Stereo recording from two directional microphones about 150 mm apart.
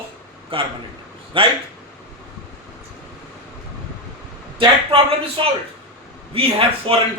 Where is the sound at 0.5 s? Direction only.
35° right (ahead or behind).